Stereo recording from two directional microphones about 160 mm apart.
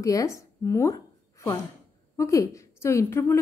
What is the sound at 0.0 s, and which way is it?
A woman's voice, 20° left (ahead or behind).